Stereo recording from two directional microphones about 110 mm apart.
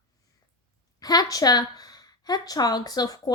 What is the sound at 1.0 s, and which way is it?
Speech, 35° left (ahead or behind).